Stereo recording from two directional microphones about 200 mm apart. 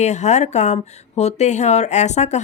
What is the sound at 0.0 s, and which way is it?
Speech, 35° left (ahead or behind).